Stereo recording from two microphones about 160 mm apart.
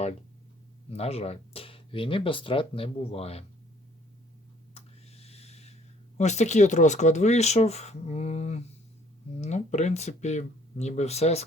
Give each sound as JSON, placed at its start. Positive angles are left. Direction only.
{"t": 0.9, "sound": "speech", "side_deg": 40}
{"t": 4.7, "sound": "a sound", "side_deg": 40}
{"t": 6.1, "sound": "speech", "side_deg": 45}